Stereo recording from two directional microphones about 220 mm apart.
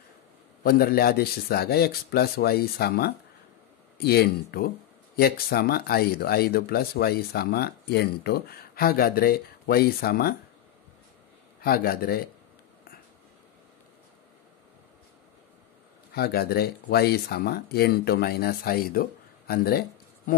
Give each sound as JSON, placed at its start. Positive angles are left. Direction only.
{"t": 0.7, "sound": "speech", "side_deg": 45}
{"t": 11.6, "sound": "speech", "side_deg": 45}
{"t": 16.1, "sound": "speech", "side_deg": 45}